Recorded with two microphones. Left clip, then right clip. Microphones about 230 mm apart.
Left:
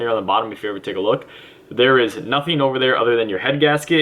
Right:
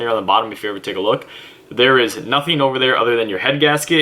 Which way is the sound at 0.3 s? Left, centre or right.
Centre.